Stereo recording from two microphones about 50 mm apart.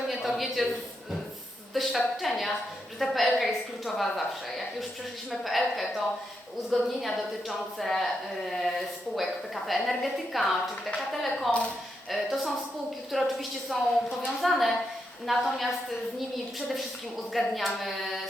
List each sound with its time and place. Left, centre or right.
0.1 s a sound: centre
1.7 s speech: centre
5.3 s a woman's voice: centre